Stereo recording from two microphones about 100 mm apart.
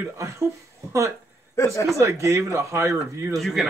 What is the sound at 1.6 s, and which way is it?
Speech, 30° left (ahead or behind).